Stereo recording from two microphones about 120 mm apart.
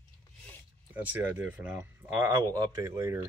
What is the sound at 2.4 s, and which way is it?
Speech, 30° right (ahead or behind).